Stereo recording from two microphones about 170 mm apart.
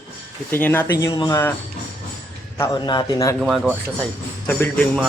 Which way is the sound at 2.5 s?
15° left (ahead or behind).